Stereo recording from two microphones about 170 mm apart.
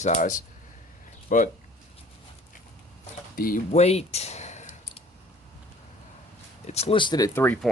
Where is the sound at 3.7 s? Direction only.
40° left (ahead or behind).